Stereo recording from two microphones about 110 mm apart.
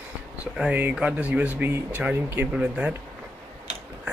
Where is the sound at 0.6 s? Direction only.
15° right (ahead or behind).